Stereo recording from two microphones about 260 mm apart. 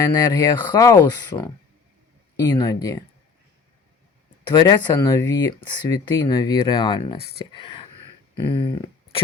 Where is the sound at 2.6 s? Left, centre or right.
Centre.